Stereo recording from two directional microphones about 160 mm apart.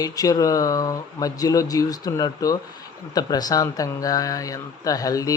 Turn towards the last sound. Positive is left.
turn(degrees=20)  # may be behind; listen again after turning